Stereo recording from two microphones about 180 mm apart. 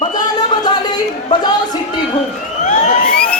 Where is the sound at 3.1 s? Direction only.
5° left (ahead or behind).